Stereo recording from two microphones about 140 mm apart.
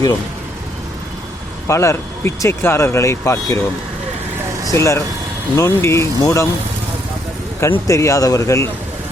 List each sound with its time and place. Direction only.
1.6 s speech: 20° left (ahead or behind)
4.8 s speech: 20° left (ahead or behind)
7.6 s speech: 20° left (ahead or behind)